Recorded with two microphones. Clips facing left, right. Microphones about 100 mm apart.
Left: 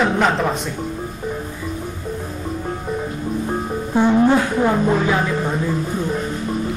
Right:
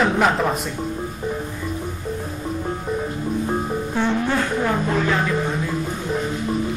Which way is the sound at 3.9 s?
15° left (ahead or behind).